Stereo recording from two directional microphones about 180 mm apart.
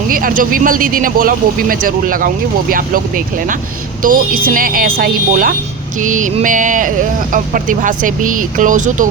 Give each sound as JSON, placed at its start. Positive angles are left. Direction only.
{"t": 0.1, "sound": "speech", "side_deg": -50}